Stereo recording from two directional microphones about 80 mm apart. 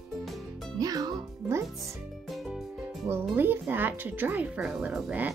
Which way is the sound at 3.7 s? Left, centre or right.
Right.